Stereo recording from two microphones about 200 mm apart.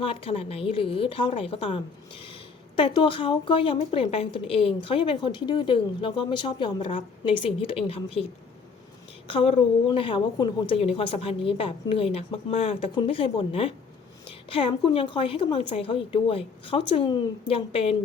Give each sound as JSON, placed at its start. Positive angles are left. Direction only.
{"t": 0.0, "sound": "a woman's voice", "side_deg": 30}